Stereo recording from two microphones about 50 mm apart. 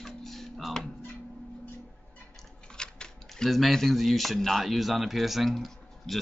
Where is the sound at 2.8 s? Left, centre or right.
Centre.